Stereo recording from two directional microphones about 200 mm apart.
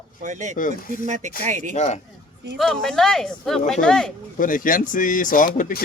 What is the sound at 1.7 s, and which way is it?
Speech, 35° left (ahead or behind).